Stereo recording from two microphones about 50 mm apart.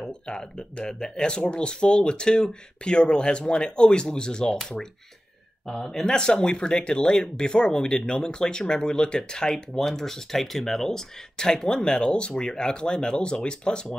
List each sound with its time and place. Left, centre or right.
0.0 s speech: centre
5.7 s speech: centre